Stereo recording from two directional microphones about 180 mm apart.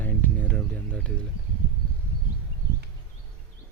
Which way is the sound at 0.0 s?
10° left (ahead or behind).